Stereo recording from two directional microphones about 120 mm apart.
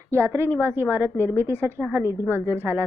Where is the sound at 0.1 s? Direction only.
20° right (ahead or behind).